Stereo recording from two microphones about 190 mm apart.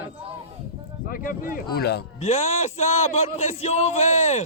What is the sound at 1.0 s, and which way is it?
Speech, 50° left (ahead or behind).